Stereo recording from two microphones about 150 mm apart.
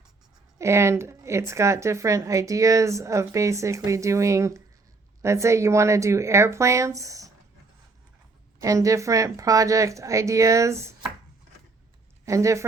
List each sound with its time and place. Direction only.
0.6 s a woman's voice: 20° right (ahead or behind)
8.6 s a woman's voice: 20° right (ahead or behind)
12.2 s speech: 20° right (ahead or behind)